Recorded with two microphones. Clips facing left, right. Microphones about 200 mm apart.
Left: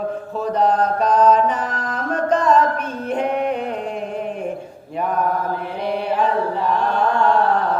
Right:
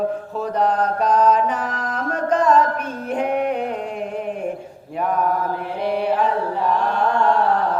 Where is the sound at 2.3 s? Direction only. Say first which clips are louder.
Even; 10° right (ahead or behind).